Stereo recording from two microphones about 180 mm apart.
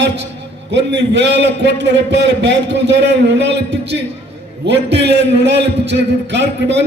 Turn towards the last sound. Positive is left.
turn(degrees=-75)  # may be behind; listen again after turning